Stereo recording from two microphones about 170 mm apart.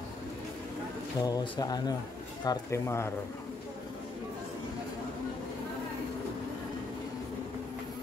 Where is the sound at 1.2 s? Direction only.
25° left (ahead or behind).